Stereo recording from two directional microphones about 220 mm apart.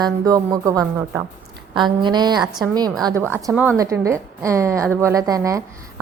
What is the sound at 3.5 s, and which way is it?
A woman's voice, 10° right (ahead or behind).